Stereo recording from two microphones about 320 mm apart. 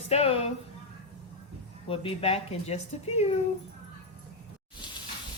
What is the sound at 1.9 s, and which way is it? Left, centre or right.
A woman's voice, centre.